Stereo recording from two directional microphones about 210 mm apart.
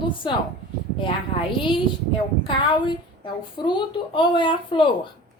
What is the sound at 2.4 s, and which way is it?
A woman's voice, 20° left (ahead or behind).